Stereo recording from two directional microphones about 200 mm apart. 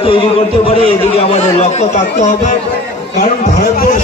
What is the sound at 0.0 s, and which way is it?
A man's voice, 25° left (ahead or behind).